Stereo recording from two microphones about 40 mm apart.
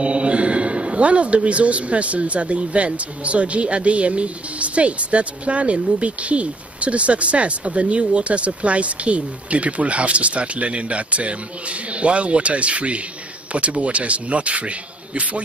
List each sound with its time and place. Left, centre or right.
0.0 s a man's voice: right